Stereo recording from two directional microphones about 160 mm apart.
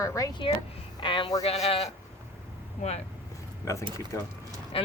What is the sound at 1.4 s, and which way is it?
Speech, 40° left (ahead or behind).